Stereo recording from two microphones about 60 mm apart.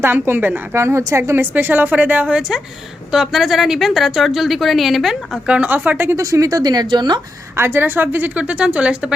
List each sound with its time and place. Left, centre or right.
0.0 s a woman's voice: right
0.8 s a woman's voice: right
1.5 s a woman's voice: right
3.1 s a woman's voice: centre
5.5 s a woman's voice: right
6.2 s speech: right
7.5 s a woman's voice: right; by 9.1 s centre